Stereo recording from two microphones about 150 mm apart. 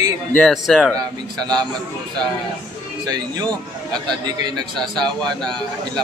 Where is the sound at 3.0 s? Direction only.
25° right (ahead or behind).